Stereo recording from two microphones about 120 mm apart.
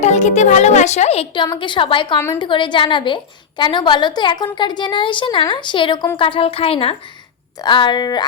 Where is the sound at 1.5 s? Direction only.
45° left (ahead or behind).